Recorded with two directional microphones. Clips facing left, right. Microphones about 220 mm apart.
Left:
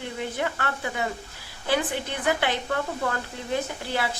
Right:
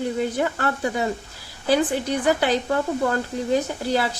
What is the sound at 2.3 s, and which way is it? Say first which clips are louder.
Speech: right 4 dB; 40° right (ahead or behind).